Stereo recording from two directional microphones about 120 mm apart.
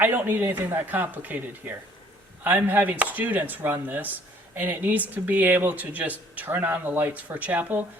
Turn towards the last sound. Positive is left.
turn(degrees=-15)  # may be behind; listen again after turning